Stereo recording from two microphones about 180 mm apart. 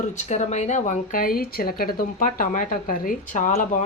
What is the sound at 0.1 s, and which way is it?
A woman's voice, 40° left (ahead or behind).